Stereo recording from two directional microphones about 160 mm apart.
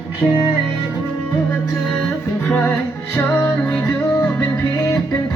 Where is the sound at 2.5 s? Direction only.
10° left (ahead or behind).